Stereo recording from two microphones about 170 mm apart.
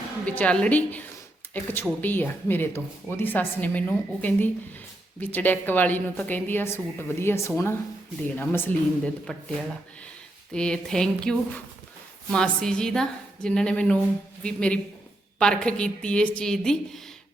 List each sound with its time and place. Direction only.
0.3 s a woman's voice: 10° left (ahead or behind)